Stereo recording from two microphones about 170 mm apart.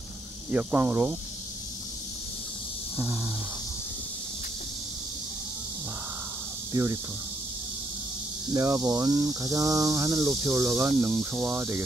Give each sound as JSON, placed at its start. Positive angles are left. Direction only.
{"t": 0.5, "sound": "cricket", "side_deg": -10}
{"t": 6.7, "sound": "cricket", "side_deg": -20}
{"t": 8.5, "sound": "cricket", "side_deg": -15}